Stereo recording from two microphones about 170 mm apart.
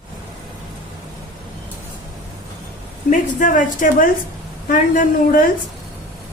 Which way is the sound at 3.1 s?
50° left (ahead or behind).